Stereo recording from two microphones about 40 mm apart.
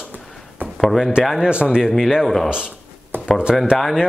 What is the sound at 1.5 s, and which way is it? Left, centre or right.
Speech, right.